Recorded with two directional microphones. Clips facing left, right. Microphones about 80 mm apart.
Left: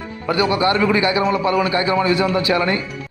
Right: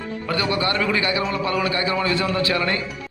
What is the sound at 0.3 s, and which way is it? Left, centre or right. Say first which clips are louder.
A man's voice: left 6 dB; left.